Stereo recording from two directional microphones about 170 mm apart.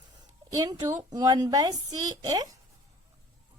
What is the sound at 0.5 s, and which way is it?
A woman's voice, 25° right (ahead or behind).